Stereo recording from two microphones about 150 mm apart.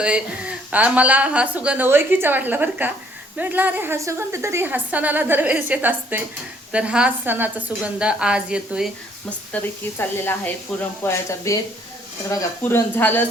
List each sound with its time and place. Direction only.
0.0 s speech: 10° right (ahead or behind)
9.6 s speech: 10° left (ahead or behind)